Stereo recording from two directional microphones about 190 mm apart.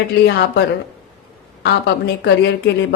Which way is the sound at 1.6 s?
65° left (ahead or behind).